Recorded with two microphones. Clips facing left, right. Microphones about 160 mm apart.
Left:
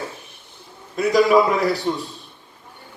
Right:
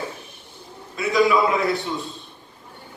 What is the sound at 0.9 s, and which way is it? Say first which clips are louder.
Speech: left 4 dB; 45° left (ahead or behind).